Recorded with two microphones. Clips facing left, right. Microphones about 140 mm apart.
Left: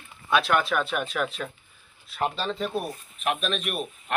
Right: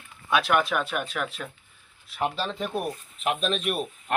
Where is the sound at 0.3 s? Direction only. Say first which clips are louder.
Even; 10° right (ahead or behind).